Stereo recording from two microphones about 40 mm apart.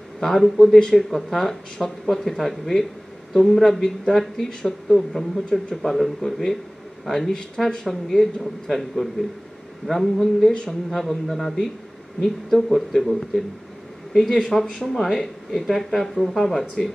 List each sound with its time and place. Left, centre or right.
0.2 s speech: centre
4.5 s speech: centre
4.8 s speech: centre
10.5 s speech: left
10.9 s speech: centre
14.3 s speech: centre